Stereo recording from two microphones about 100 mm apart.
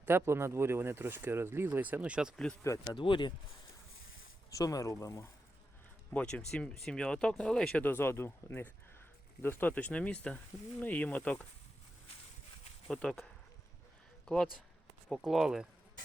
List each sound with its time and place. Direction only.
0.0 s speech: 25° right (ahead or behind)
2.3 s speech: 5° left (ahead or behind)
2.8 s speech: 55° left (ahead or behind)
4.5 s speech: 35° left (ahead or behind)
6.1 s speech: 10° left (ahead or behind)
7.9 s speech: 20° left (ahead or behind)
12.9 s speech: 5° left (ahead or behind)
14.3 s speech: 5° left (ahead or behind)